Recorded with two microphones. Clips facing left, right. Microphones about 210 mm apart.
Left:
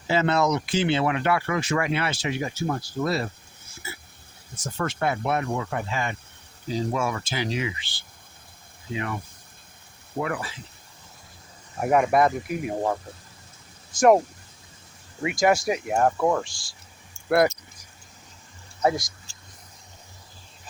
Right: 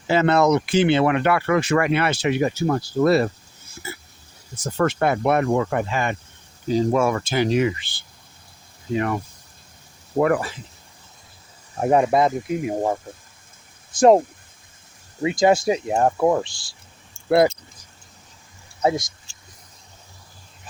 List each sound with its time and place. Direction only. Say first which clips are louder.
0.1 s speech: right 5 dB; 60° right (ahead or behind)
4.8 s speech: right 7 dB; 60° right (ahead or behind)
11.8 s speech: right 3 dB; 30° right (ahead or behind)
15.2 s speech: right 4 dB; 25° right (ahead or behind)
18.8 s speech: right 2 dB; 20° right (ahead or behind)